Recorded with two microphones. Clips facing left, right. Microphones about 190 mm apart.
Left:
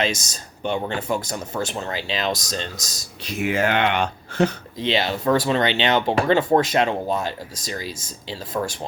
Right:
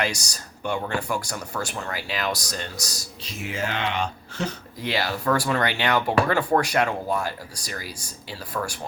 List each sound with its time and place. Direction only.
0.0 s speech: 20° left (ahead or behind)
3.2 s speech: 60° left (ahead or behind)
4.8 s speech: 20° left (ahead or behind)